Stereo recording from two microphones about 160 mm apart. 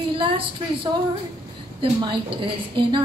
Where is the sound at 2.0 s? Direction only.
30° right (ahead or behind).